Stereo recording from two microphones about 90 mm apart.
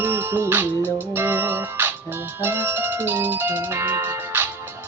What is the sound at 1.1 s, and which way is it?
Speech, 25° right (ahead or behind).